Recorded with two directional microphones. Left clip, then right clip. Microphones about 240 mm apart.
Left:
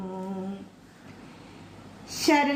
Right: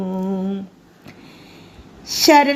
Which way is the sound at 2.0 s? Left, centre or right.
Right.